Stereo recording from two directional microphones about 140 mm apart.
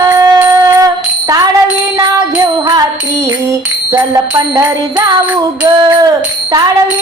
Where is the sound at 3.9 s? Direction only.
25° right (ahead or behind).